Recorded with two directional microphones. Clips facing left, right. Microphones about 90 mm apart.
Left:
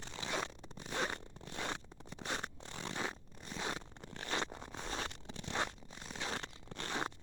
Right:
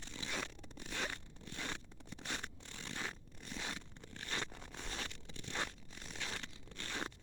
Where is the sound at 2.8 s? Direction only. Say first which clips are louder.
Left 5 dB; 25° left (ahead or behind).